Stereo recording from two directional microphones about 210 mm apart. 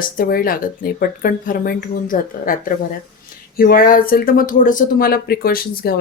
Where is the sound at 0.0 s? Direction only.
45° left (ahead or behind).